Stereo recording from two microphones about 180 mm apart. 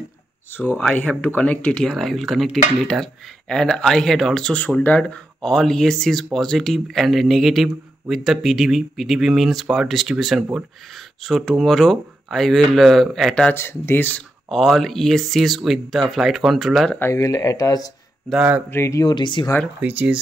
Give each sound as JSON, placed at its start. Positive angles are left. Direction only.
{"t": 0.6, "sound": "speech", "side_deg": 5}
{"t": 17.0, "sound": "speech", "side_deg": 15}
{"t": 18.3, "sound": "speech", "side_deg": -10}
{"t": 18.7, "sound": "speech", "side_deg": 15}
{"t": 19.8, "sound": "speech", "side_deg": -10}